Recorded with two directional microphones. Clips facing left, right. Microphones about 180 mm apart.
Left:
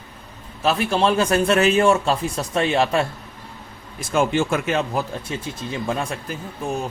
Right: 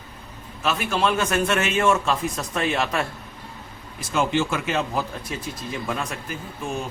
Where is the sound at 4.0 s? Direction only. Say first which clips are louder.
Left 3 dB; 50° left (ahead or behind).